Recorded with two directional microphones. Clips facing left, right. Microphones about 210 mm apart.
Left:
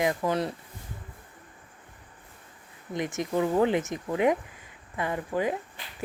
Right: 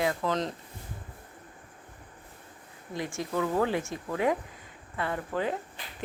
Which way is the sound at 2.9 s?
20° left (ahead or behind).